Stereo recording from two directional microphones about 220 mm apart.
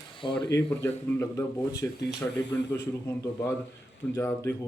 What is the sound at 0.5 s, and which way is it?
Speech, 10° left (ahead or behind).